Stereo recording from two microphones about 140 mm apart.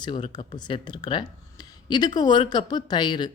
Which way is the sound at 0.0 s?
35° left (ahead or behind).